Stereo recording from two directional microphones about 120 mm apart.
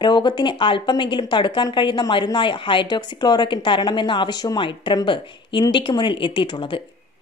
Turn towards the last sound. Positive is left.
turn(degrees=40)  # may be behind; listen again after turning